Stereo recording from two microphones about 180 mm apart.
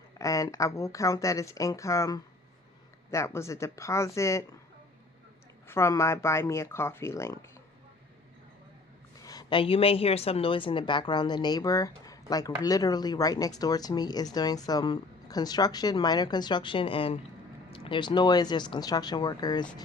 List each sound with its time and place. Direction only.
0.2 s speech: 20° left (ahead or behind)
5.6 s speech: 15° left (ahead or behind)
9.2 s a woman's voice: 20° left (ahead or behind)